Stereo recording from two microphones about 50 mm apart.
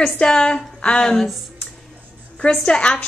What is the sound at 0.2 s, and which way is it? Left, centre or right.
Speech, centre.